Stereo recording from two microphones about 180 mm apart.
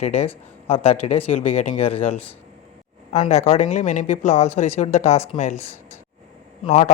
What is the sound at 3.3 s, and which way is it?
Speech, 40° left (ahead or behind).